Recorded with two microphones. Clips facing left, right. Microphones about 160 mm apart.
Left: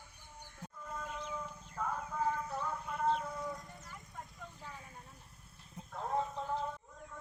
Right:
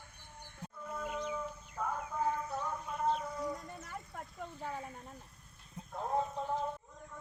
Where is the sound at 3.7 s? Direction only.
60° right (ahead or behind).